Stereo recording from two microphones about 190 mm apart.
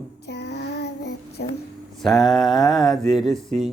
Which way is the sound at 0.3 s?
65° left (ahead or behind).